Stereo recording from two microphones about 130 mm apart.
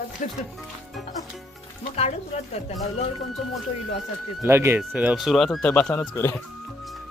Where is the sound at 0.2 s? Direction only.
75° left (ahead or behind).